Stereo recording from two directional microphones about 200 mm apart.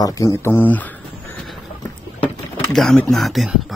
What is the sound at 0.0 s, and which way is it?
Speech, 15° left (ahead or behind).